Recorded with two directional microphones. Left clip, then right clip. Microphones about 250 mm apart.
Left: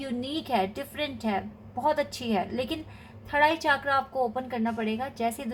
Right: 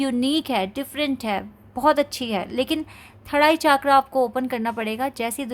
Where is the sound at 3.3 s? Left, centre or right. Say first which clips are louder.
Right 6 dB; right.